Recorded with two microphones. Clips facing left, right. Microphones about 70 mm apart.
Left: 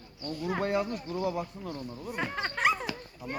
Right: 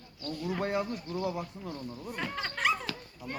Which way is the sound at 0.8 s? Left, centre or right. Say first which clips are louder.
Left 2 dB; left.